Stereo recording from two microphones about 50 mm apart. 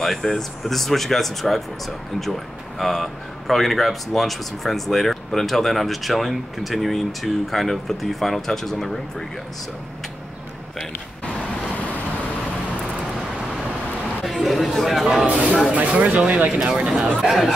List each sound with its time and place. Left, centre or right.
0.0 s speech: centre
14.2 s chatter: centre
15.7 s speech: right
16.4 s speech: centre